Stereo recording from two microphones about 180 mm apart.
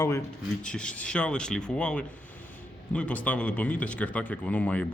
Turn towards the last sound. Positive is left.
turn(degrees=10)  # may be behind; listen again after turning